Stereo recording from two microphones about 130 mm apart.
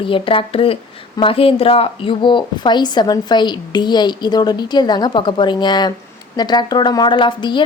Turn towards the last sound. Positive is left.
turn(degrees=35)  # may be behind; listen again after turning